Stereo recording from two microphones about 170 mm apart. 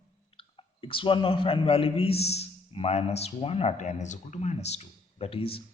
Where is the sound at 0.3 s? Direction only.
30° left (ahead or behind).